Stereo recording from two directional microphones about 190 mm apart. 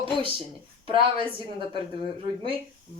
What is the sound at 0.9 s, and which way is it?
Speech, 25° right (ahead or behind).